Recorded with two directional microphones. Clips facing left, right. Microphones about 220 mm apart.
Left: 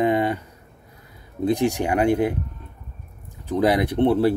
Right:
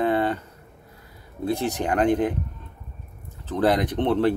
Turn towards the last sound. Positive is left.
turn(degrees=10)  # may be behind; listen again after turning